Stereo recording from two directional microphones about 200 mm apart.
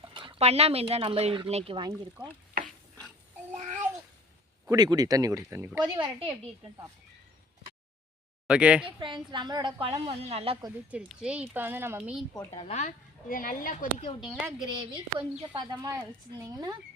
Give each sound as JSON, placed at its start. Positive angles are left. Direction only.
{"t": 0.0, "sound": "speech", "side_deg": -25}
{"t": 1.9, "sound": "speech", "side_deg": -5}
{"t": 3.5, "sound": "child singing", "side_deg": -35}
{"t": 4.7, "sound": "speech", "side_deg": -20}
{"t": 8.4, "sound": "speech", "side_deg": -5}
{"t": 9.0, "sound": "a woman's voice", "side_deg": -25}
{"t": 10.9, "sound": "speech", "side_deg": -5}
{"t": 12.3, "sound": "a woman's voice", "side_deg": 20}
{"t": 12.6, "sound": "a woman's voice", "side_deg": 35}
{"t": 14.2, "sound": "speech", "side_deg": -5}
{"t": 14.6, "sound": "a woman's voice", "side_deg": -25}